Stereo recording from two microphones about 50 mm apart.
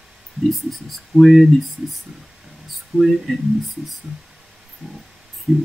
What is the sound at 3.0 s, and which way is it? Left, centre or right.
Speech, centre.